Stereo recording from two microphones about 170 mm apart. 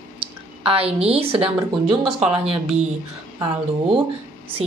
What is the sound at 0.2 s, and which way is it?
A woman's voice, 35° right (ahead or behind).